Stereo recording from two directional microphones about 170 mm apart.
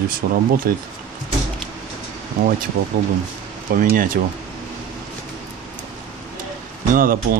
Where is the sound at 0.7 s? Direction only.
65° right (ahead or behind).